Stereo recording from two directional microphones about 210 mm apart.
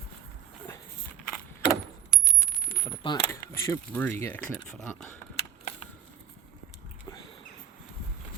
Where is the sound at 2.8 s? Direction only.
25° left (ahead or behind).